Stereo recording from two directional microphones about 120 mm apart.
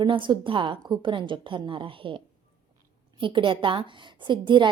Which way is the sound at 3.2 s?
45° right (ahead or behind).